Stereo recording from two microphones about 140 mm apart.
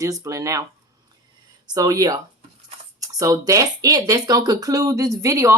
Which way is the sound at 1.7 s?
25° right (ahead or behind).